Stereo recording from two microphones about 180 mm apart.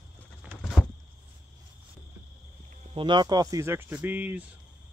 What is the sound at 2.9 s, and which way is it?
Speech, 25° right (ahead or behind).